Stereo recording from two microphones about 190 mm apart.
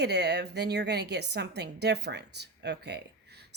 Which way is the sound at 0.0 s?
60° right (ahead or behind).